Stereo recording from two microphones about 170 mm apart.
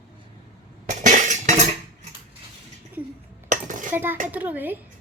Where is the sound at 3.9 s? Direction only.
10° right (ahead or behind).